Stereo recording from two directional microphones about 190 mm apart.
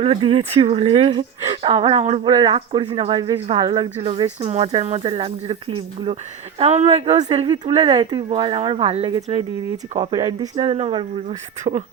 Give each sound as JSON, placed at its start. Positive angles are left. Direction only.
{"t": 0.0, "sound": "speech", "side_deg": -30}